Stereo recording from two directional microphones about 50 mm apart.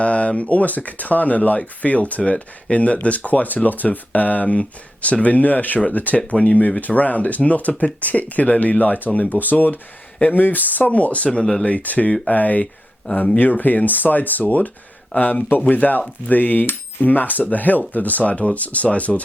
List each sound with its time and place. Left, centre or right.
0.0 s speech: left
5.0 s cutlery: left
10.2 s speech: left
11.3 s speech: centre
11.6 s speech: left
12.3 s cutlery: left
15.1 s speech: left
15.7 s cutlery: left